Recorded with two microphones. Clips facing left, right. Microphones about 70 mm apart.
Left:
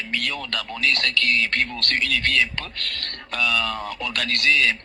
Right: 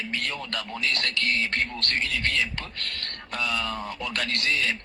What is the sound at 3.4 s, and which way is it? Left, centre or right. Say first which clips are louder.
A man's voice: left 5 dB; left.